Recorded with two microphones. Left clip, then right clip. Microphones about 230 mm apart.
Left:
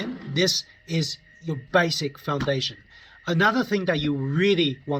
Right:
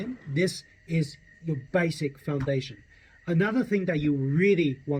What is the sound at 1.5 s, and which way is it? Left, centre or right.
Speech, left.